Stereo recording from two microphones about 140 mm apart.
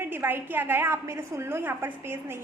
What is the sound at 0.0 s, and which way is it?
A woman's voice, 15° right (ahead or behind).